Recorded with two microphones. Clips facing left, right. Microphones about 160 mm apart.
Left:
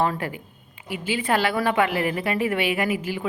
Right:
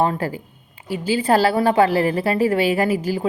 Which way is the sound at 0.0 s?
30° right (ahead or behind).